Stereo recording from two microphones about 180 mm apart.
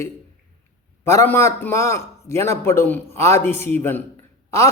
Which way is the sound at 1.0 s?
15° left (ahead or behind).